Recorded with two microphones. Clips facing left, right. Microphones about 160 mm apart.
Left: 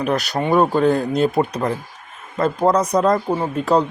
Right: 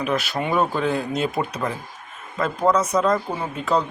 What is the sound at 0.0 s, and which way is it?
Speech, 40° left (ahead or behind).